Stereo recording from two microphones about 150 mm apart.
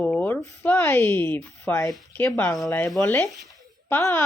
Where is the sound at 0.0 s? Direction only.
10° left (ahead or behind).